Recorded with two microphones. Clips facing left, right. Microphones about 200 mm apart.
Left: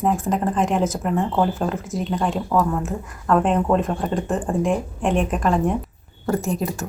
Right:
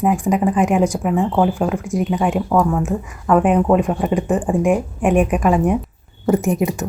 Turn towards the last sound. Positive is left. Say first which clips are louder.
# right 6 dB
turn(degrees=-15)  # may be behind; listen again after turning